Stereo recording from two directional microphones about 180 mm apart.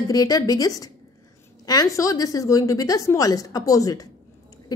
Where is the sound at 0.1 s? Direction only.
20° left (ahead or behind).